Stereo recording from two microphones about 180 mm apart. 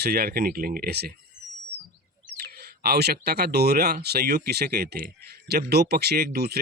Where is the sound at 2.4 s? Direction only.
60° right (ahead or behind).